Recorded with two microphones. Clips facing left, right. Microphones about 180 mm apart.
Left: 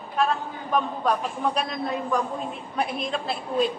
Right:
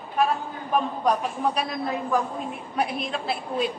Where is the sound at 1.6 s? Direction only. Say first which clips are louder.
Even; 5° right (ahead or behind).